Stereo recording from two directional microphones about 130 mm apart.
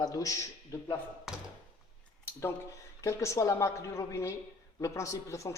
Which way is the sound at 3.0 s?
25° left (ahead or behind).